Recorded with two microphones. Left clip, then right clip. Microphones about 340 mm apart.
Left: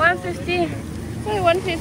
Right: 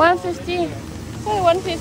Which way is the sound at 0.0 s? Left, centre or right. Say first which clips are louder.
Right 3 dB; centre.